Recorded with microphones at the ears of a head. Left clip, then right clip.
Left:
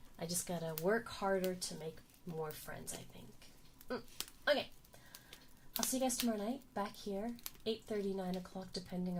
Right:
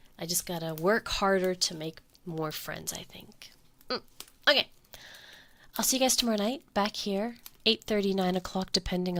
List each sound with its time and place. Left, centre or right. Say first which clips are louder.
0.2 s speech: right 8 dB; right